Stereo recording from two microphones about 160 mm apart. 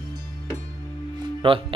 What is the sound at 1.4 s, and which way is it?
Speech, 35° right (ahead or behind).